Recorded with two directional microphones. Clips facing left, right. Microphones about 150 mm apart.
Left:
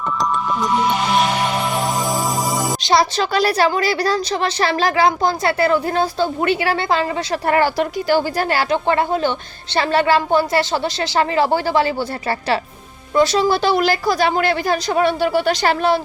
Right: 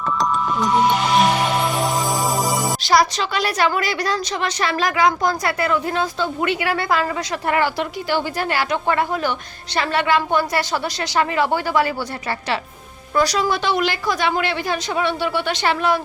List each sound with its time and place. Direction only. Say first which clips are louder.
2.3 s music: even; centre (ahead or behind)
2.8 s speech: left 1 dB; 25° left (ahead or behind)
7.4 s speech: left 3 dB; 40° left (ahead or behind)